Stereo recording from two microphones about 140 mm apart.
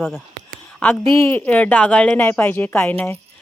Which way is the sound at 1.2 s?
15° left (ahead or behind).